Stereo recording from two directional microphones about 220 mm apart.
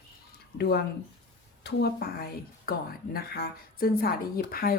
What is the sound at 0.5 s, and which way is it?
A woman's voice, 45° left (ahead or behind).